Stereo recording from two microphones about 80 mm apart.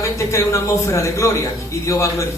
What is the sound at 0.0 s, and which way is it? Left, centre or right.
A man's voice, left.